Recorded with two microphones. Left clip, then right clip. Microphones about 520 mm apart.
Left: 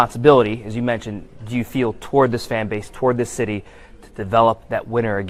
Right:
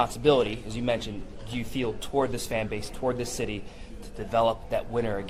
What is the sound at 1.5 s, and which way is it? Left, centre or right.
Speech, left.